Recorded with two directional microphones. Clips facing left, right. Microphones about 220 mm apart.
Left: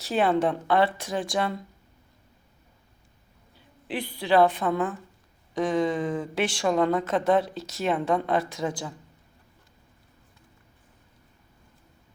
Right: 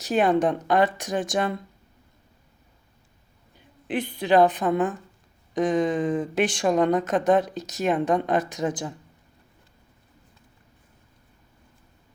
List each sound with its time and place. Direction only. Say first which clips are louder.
0.0 s a woman's voice: right 2 dB; 15° right (ahead or behind)
3.8 s a woman's voice: right 3 dB; 20° right (ahead or behind)